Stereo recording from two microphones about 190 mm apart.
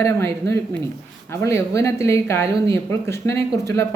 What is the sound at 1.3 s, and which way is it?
Speech, 15° left (ahead or behind).